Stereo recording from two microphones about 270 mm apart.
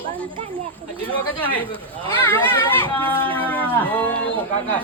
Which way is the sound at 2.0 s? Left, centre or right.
Centre.